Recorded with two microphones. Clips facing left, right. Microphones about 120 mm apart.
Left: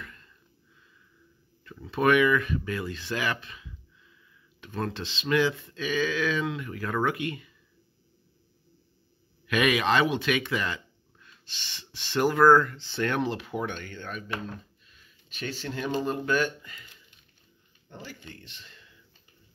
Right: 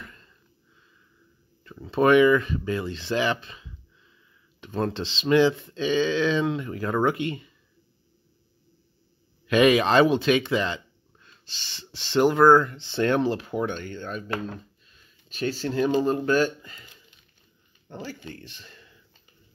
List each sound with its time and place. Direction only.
0.0 s sniff: 30° right (ahead or behind)
1.6 s speech: 30° right (ahead or behind)
9.5 s speech: 30° right (ahead or behind)